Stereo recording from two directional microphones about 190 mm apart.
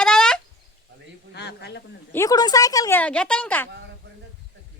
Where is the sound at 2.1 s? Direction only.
15° left (ahead or behind).